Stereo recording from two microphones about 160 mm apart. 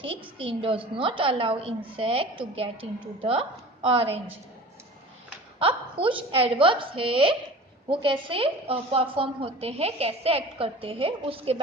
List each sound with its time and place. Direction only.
0.0 s a woman's voice: 35° right (ahead or behind)
5.5 s a woman's voice: 35° right (ahead or behind)